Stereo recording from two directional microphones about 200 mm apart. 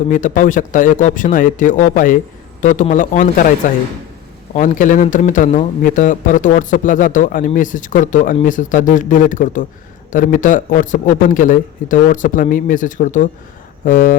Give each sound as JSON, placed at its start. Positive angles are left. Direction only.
{"t": 0.1, "sound": "a man's voice", "side_deg": 40}
{"t": 4.5, "sound": "a man's voice", "side_deg": 40}